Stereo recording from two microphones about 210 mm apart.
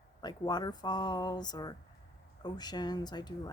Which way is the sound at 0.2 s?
20° left (ahead or behind).